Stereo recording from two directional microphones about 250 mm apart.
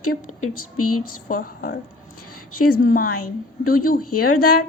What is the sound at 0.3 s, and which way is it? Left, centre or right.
Speech, left.